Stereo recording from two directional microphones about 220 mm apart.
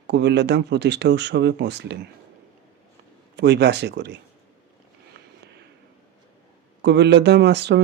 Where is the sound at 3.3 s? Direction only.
50° right (ahead or behind).